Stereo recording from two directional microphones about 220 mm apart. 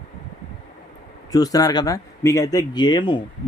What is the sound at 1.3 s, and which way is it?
Speech, 15° left (ahead or behind).